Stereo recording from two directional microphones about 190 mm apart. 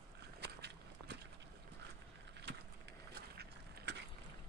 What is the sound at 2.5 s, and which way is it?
Vehicle, 65° right (ahead or behind).